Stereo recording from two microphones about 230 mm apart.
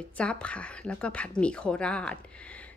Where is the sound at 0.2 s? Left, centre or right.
Centre.